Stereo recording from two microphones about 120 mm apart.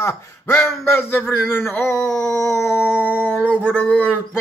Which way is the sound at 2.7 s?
20° left (ahead or behind).